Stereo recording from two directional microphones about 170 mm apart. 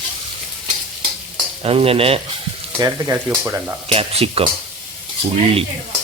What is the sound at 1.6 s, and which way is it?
Speech, 35° right (ahead or behind).